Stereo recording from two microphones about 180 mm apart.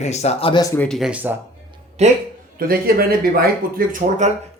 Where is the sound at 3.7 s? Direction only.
45° right (ahead or behind).